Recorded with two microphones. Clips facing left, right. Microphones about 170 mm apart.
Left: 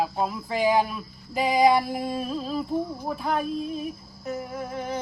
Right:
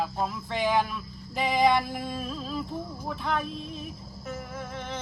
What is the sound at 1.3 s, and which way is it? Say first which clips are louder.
Female singing: left 3 dB; 40° left (ahead or behind).